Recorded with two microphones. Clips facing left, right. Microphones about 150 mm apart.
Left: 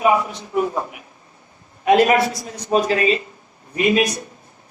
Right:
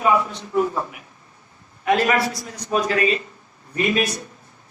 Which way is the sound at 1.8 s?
20° left (ahead or behind).